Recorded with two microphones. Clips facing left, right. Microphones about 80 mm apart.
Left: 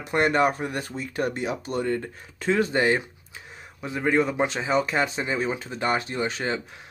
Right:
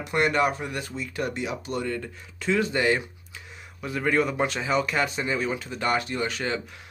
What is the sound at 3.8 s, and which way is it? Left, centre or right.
Speech, left.